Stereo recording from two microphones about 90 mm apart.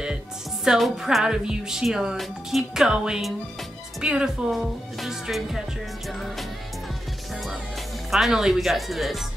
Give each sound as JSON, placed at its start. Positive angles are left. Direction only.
{"t": 0.7, "sound": "speech", "side_deg": -5}
{"t": 8.1, "sound": "speech", "side_deg": -5}